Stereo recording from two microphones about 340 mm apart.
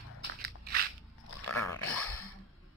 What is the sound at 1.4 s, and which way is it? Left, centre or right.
Dog, left.